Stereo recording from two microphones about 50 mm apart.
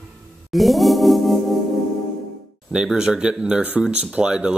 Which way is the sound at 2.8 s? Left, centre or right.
Centre.